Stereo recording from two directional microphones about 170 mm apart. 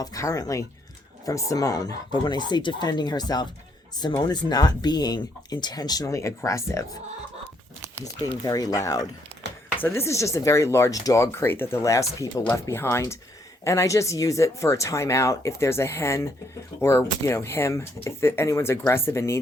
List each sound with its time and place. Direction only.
0.0 s speech: 20° left (ahead or behind)
8.2 s speech: 20° left (ahead or behind)